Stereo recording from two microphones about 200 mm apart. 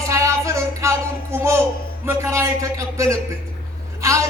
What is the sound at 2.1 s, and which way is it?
Speech, 15° right (ahead or behind).